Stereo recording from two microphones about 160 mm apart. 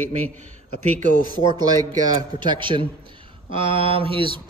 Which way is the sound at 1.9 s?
30° right (ahead or behind).